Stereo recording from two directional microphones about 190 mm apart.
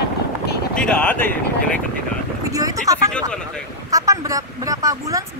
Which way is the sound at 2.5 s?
20° right (ahead or behind).